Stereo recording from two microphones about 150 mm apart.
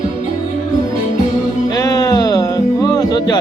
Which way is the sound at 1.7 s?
25° left (ahead or behind).